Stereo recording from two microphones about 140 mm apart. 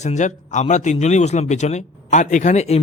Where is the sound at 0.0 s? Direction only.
55° left (ahead or behind).